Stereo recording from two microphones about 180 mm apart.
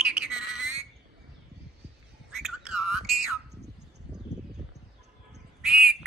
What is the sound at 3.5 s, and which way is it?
Bird, 65° right (ahead or behind).